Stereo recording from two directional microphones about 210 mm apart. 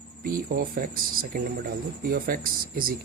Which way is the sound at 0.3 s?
45° right (ahead or behind).